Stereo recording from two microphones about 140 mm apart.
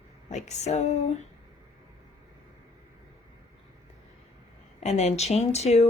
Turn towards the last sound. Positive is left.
turn(degrees=50)  # may be behind; listen again after turning